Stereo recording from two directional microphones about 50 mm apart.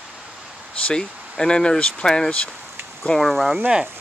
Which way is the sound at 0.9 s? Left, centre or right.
Centre.